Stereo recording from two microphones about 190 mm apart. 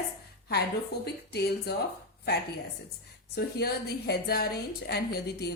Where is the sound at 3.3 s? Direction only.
55° left (ahead or behind).